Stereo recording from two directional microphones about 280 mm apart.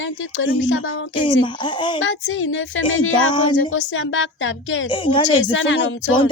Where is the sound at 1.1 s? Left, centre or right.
Centre.